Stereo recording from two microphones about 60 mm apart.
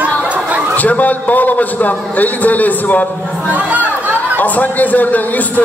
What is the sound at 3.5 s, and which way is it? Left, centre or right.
Speech, right.